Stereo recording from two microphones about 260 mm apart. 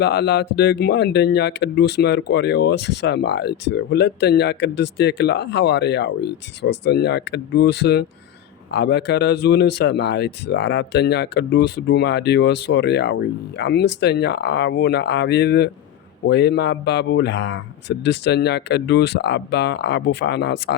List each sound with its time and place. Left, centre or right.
0.0 s speech: left